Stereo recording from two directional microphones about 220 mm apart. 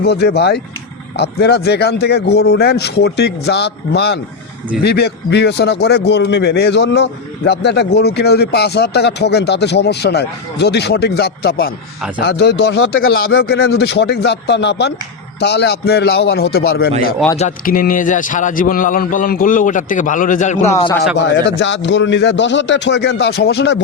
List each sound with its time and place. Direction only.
0.0 s a man's voice: 50° left (ahead or behind)
17.3 s a man's voice: 35° left (ahead or behind)
21.2 s a man's voice: 55° left (ahead or behind)